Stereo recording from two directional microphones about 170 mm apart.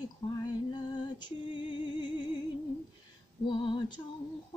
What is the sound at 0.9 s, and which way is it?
Music, 25° left (ahead or behind).